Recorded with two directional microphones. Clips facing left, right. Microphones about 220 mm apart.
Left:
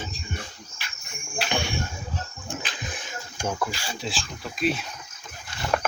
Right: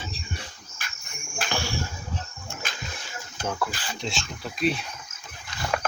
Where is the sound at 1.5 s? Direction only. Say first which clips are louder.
Left 2 dB; 20° left (ahead or behind).